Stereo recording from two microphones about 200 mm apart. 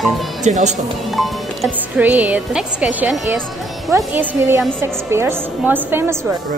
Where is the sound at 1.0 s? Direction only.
Centre (ahead or behind).